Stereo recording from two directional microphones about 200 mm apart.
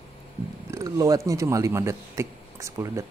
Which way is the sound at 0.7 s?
15° right (ahead or behind).